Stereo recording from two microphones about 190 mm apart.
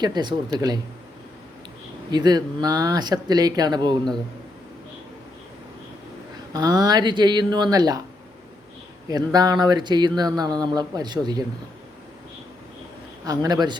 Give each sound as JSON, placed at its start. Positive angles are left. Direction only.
{"t": 0.0, "sound": "speech", "side_deg": -25}
{"t": 2.0, "sound": "speech", "side_deg": -20}
{"t": 6.5, "sound": "speech", "side_deg": -20}
{"t": 9.0, "sound": "speech", "side_deg": -20}
{"t": 13.2, "sound": "speech", "side_deg": -20}